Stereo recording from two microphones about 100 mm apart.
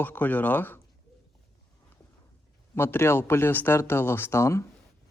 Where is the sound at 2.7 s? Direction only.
25° left (ahead or behind).